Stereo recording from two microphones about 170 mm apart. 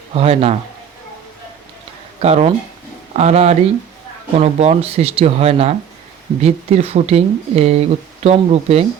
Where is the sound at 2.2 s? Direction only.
40° right (ahead or behind).